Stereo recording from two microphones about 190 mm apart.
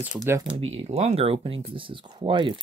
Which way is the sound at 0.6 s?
35° right (ahead or behind).